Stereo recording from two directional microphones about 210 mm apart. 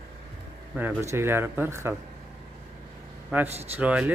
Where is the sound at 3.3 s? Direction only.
5° right (ahead or behind).